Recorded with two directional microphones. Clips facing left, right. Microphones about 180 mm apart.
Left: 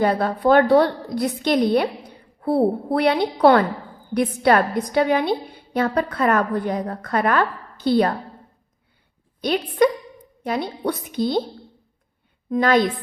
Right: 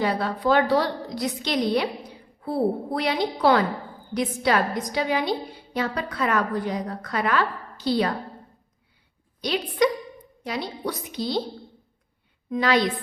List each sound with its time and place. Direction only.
0.0 s a woman's voice: 55° left (ahead or behind)
9.4 s a woman's voice: 50° left (ahead or behind)
12.5 s a woman's voice: 50° left (ahead or behind)